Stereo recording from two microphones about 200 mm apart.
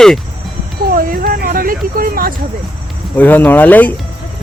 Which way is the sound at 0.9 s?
45° right (ahead or behind).